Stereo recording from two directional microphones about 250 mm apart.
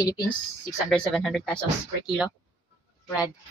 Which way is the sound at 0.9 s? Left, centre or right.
Centre.